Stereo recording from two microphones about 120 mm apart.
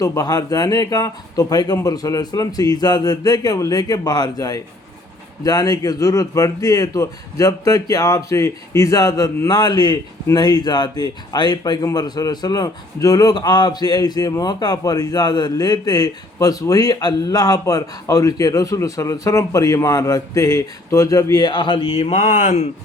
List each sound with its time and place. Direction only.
0.0 s a man's voice: 30° left (ahead or behind); by 22.6 s 90° left